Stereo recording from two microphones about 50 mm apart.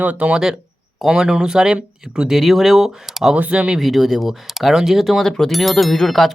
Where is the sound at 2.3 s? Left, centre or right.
Centre.